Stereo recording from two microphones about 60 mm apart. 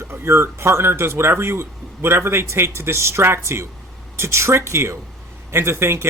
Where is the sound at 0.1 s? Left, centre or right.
Right.